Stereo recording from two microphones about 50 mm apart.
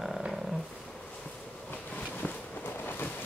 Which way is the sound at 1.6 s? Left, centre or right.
Left.